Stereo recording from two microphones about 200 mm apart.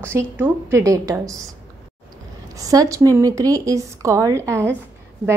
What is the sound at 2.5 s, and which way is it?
A woman's voice, 15° right (ahead or behind).